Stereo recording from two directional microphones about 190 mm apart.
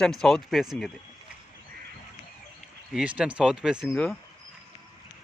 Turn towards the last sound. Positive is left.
turn(degrees=0)  # may be behind; listen again after turning